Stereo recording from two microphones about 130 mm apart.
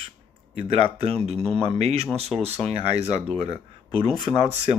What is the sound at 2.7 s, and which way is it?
Speech, 50° right (ahead or behind).